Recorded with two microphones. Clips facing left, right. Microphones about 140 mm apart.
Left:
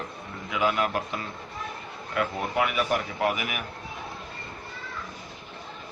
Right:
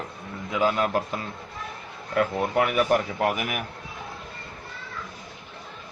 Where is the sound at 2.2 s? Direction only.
40° right (ahead or behind).